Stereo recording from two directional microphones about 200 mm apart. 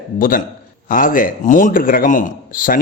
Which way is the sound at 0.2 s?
45° left (ahead or behind).